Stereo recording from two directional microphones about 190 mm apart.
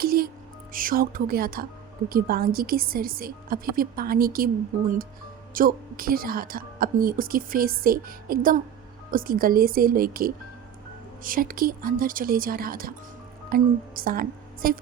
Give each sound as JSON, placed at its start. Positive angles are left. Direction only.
{"t": 0.0, "sound": "music", "side_deg": -50}
{"t": 0.7, "sound": "a woman's voice", "side_deg": -45}
{"t": 5.5, "sound": "a woman's voice", "side_deg": -50}